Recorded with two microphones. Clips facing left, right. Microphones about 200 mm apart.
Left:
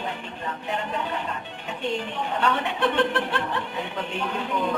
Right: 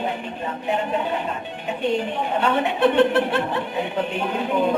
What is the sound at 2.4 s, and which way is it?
A man's voice, 15° right (ahead or behind).